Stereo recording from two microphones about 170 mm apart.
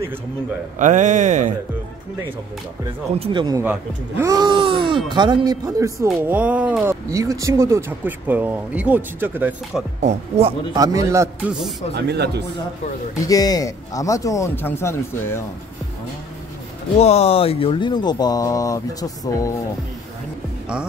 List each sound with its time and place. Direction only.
0.7 s a man's voice: 45° right (ahead or behind)
3.2 s speech: 25° right (ahead or behind)
3.6 s speech: 15° right (ahead or behind)
10.0 s speech: 40° right (ahead or behind)
10.7 s speech: 20° right (ahead or behind)
11.9 s speech: 80° right
13.2 s speech: 20° left (ahead or behind)
17.0 s speech: 35° left (ahead or behind); by 19.5 s 20° left (ahead or behind)